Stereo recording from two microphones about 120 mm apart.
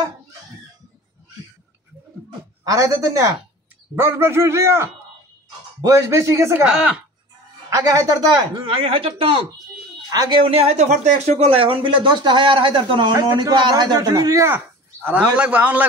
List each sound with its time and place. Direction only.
2.6 s a man's voice: 25° right (ahead or behind)
6.6 s speech: 5° right (ahead or behind)
7.7 s speech: 30° right (ahead or behind)
8.6 s speech: 50° right (ahead or behind)
10.1 s speech: 35° right (ahead or behind)
10.4 s speech: 55° right (ahead or behind); by 15.9 s 10° right (ahead or behind)